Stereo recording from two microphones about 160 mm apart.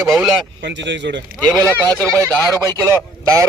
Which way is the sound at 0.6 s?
90° right.